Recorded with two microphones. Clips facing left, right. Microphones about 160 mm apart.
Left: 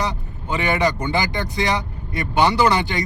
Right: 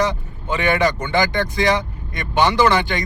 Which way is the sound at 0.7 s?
30° left (ahead or behind).